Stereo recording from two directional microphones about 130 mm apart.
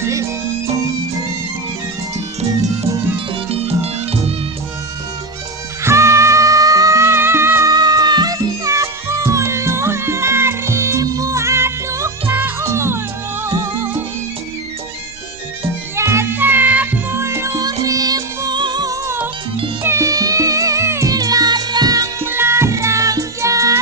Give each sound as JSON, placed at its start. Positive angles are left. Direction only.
{"t": 0.0, "sound": "music", "side_deg": -25}
{"t": 3.5, "sound": "music", "side_deg": -50}
{"t": 5.8, "sound": "music", "side_deg": -20}
{"t": 16.0, "sound": "music", "side_deg": -20}